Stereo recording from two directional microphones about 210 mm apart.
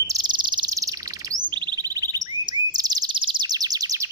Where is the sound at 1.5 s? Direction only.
20° right (ahead or behind).